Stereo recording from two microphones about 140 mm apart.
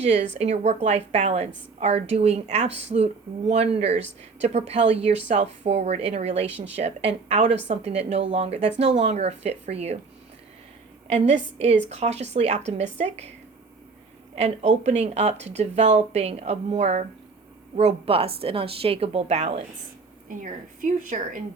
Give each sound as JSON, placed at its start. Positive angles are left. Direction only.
{"t": 0.0, "sound": "a woman's voice", "side_deg": -50}
{"t": 11.1, "sound": "a woman's voice", "side_deg": -50}
{"t": 14.3, "sound": "a woman's voice", "side_deg": -55}
{"t": 20.2, "sound": "a woman's voice", "side_deg": -70}